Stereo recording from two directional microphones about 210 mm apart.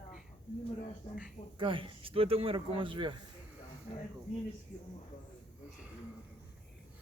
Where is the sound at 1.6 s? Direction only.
25° right (ahead or behind).